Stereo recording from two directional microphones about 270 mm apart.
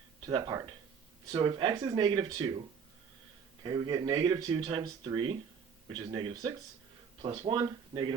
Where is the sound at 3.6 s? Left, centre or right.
Centre.